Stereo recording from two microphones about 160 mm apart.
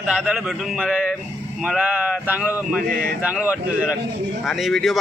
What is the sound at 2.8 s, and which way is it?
Speech, 65° right (ahead or behind).